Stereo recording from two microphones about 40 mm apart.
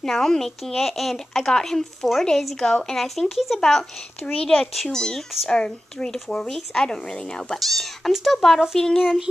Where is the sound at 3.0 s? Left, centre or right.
Centre.